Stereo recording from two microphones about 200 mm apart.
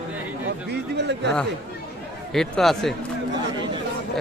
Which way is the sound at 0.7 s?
60° right (ahead or behind).